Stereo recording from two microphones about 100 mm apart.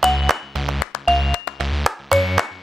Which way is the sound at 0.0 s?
Centre (ahead or behind).